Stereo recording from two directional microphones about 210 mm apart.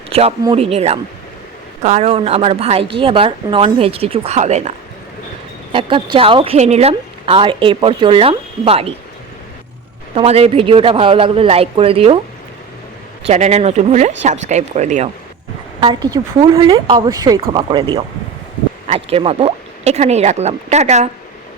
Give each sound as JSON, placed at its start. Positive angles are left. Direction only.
{"t": 0.1, "sound": "a woman's voice", "side_deg": -30}
{"t": 5.7, "sound": "a woman's voice", "side_deg": -25}
{"t": 10.2, "sound": "a woman's voice", "side_deg": -30}
{"t": 13.2, "sound": "speech", "side_deg": -35}
{"t": 15.8, "sound": "a woman's voice", "side_deg": -20}